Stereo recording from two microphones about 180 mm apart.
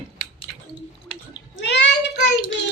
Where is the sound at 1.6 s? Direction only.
70° left (ahead or behind).